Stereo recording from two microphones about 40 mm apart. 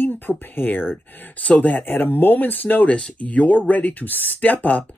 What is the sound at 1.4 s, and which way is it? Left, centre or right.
Speech, left.